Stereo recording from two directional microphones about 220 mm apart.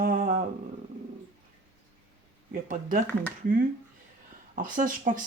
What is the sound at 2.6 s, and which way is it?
Speech, 35° right (ahead or behind).